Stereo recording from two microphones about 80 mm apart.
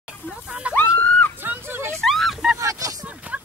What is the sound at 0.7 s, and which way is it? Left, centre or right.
Screaming, left.